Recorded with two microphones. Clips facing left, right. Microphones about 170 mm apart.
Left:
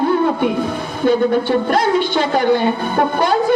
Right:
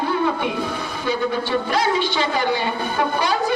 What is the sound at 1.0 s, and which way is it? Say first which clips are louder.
A man's voice: left 9 dB; 50° left (ahead or behind).